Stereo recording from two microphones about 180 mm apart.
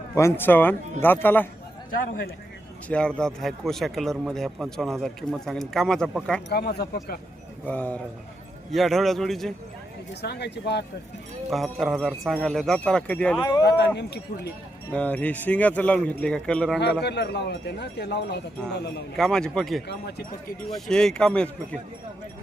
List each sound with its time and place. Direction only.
0.1 s speech: 15° left (ahead or behind)
2.9 s a man's voice: 5° left (ahead or behind)
6.5 s speech: 65° left (ahead or behind)
7.6 s a man's voice: 10° left (ahead or behind)
10.2 s speech: 65° left (ahead or behind)
11.5 s a man's voice: centre (ahead or behind)
13.4 s speech: 25° left (ahead or behind)
13.7 s speech: 70° left (ahead or behind)
14.9 s speech: 10° left (ahead or behind)
17.0 s speech: 70° left (ahead or behind)
19.1 s a man's voice: 5° left (ahead or behind)
19.9 s speech: 65° left (ahead or behind)
20.7 s a man's voice: centre (ahead or behind)